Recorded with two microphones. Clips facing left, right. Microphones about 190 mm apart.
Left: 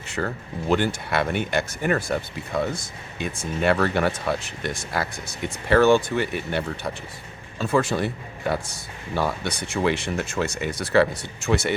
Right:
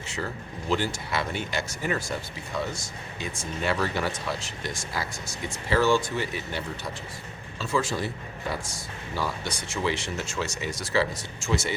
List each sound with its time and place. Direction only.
0.7 s speech: 60° left (ahead or behind)